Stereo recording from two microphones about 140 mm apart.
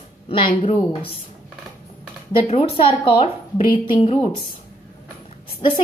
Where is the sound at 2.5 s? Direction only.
40° left (ahead or behind).